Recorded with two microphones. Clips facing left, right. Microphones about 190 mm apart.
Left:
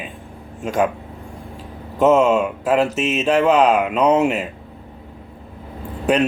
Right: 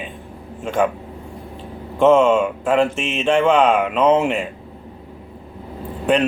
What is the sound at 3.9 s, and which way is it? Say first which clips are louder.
Speech: right 1 dB; centre (ahead or behind).